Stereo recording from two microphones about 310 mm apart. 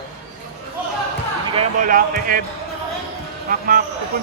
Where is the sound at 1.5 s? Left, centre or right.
Right.